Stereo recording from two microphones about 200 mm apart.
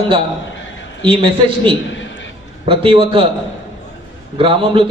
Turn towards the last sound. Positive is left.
turn(degrees=-25)  # may be behind; listen again after turning